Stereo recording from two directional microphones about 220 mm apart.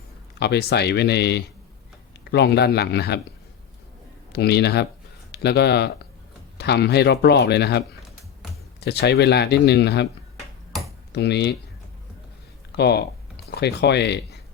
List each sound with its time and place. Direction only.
0.3 s speech: 50° left (ahead or behind)
4.3 s speech: 50° left (ahead or behind)
11.1 s speech: 50° left (ahead or behind)
12.7 s speech: 50° left (ahead or behind)